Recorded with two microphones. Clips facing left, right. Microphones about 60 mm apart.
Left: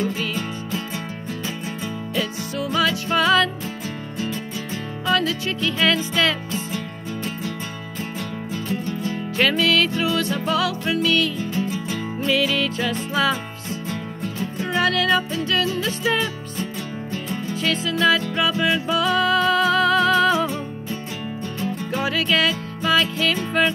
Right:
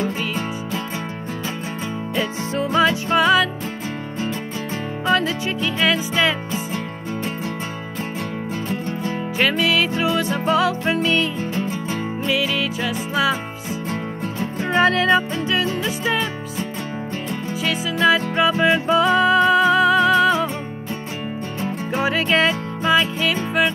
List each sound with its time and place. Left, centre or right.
2.1 s music: right
3.2 s music: centre
5.0 s music: right
5.6 s music: centre
9.4 s music: centre
11.5 s music: right
12.2 s music: centre
13.8 s music: right; by 18.2 s centre
18.3 s music: right; by 20.4 s centre
21.5 s music: right
22.9 s music: centre